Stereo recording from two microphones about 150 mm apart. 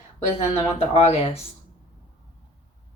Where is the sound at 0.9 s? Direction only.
45° left (ahead or behind).